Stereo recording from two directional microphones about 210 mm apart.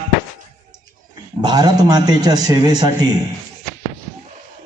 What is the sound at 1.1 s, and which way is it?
Speech, 20° right (ahead or behind).